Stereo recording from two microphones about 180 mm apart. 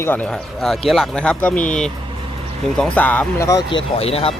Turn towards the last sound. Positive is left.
turn(degrees=35)  # may be behind; listen again after turning